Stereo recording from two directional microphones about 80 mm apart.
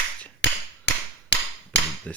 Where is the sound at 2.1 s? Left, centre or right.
Centre.